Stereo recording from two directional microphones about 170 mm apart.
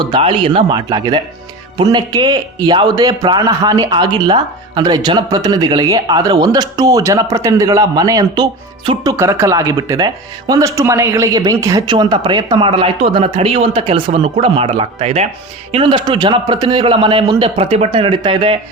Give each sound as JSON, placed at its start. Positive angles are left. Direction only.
{"t": 0.0, "sound": "a man's voice", "side_deg": -30}